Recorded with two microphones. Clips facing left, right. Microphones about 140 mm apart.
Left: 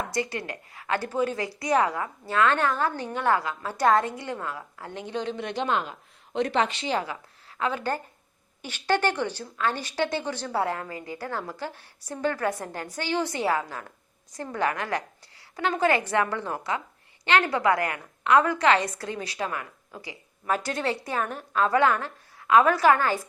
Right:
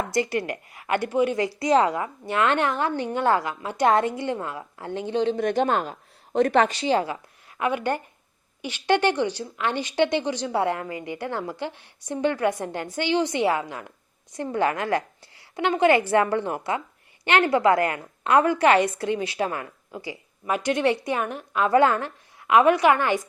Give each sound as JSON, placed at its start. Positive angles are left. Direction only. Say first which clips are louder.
{"t": 0.3, "sound": "a woman's voice", "louder": "right 7 dB", "side_deg": -20}
{"t": 5.4, "sound": "speech", "louder": "right 5 dB", "side_deg": -45}
{"t": 6.7, "sound": "a woman's voice", "louder": "right 5 dB", "side_deg": -30}
{"t": 7.6, "sound": "a woman's voice", "louder": "right 3 dB", "side_deg": -20}